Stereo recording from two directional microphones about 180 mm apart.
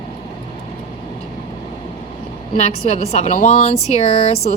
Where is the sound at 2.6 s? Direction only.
35° left (ahead or behind).